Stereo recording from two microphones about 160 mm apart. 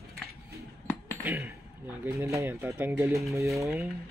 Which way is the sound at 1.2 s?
15° right (ahead or behind).